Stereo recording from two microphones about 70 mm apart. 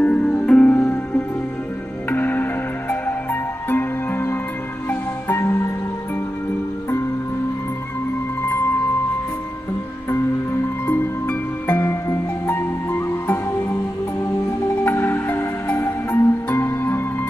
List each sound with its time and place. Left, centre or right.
0.0 s music: left
2.0 s music: left
3.7 s music: left
10.9 s music: left
14.9 s music: left